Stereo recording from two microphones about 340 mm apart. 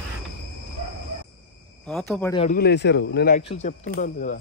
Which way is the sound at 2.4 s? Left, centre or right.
Left.